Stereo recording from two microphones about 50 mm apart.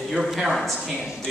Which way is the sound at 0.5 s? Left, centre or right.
Centre.